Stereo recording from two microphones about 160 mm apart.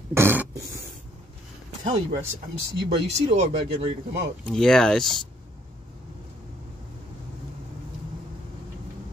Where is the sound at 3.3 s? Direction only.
40° right (ahead or behind).